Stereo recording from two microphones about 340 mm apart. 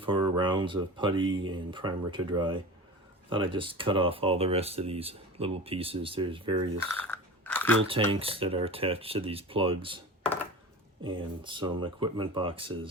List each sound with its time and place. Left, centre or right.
0.0 s speech: centre
6.9 s crunch: centre
7.9 s speech: centre
11.0 s speech: centre